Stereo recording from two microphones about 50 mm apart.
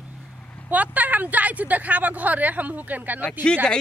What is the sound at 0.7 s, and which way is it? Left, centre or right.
Speech, right.